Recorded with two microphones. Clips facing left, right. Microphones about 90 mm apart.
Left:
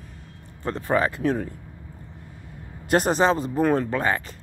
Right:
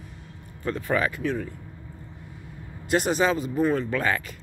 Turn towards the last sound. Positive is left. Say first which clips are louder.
# left 1 dB
turn(degrees=30)  # may be behind; listen again after turning